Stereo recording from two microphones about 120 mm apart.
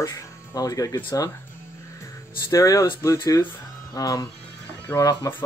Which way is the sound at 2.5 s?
30° left (ahead or behind).